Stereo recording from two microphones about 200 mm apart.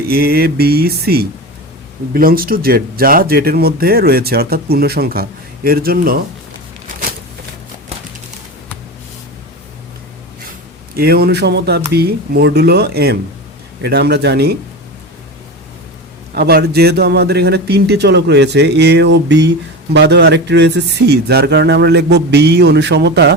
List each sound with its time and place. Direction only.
0.1 s speech: 50° right (ahead or behind)
10.9 s speech: 50° right (ahead or behind)
16.3 s speech: 50° right (ahead or behind)